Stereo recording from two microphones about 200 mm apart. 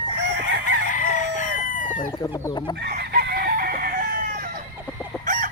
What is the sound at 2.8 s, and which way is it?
Chicken, 55° right (ahead or behind).